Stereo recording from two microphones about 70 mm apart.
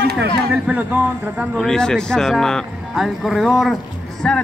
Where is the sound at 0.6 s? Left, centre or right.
Right.